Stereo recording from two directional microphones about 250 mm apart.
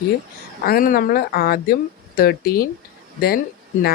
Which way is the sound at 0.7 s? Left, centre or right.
Left.